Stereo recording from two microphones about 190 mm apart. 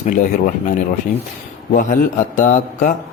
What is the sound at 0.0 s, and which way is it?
Speech, 45° left (ahead or behind).